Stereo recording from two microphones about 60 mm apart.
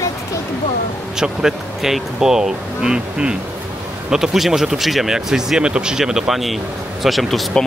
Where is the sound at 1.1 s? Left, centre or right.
Centre.